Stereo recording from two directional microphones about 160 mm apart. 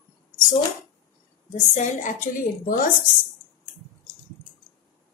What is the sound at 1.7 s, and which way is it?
A woman's voice, 50° left (ahead or behind).